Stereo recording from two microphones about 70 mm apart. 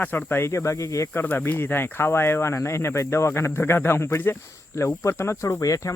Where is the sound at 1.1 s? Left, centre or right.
Left.